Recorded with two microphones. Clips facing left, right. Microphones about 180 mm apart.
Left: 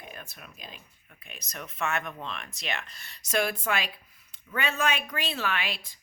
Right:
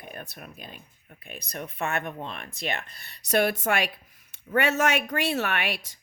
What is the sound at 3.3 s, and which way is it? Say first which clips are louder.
Speech: right 4 dB; 65° right (ahead or behind).